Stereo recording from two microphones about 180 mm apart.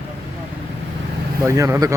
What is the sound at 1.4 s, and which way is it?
Speech, 15° right (ahead or behind).